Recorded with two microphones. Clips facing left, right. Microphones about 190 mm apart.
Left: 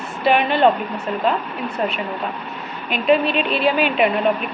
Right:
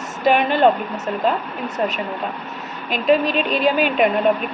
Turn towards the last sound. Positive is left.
turn(degrees=-45)  # may be behind; listen again after turning